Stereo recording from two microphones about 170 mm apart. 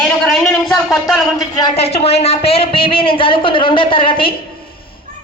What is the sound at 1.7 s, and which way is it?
Speech, 35° left (ahead or behind).